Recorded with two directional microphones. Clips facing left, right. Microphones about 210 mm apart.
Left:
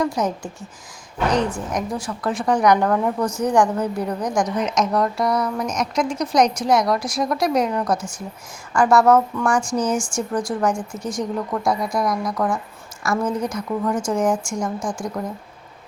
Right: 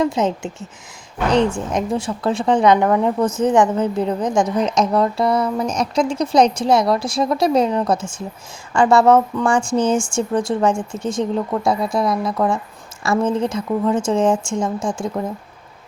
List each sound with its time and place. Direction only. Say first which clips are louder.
0.0 s a woman's voice: right 3 dB; 25° right (ahead or behind)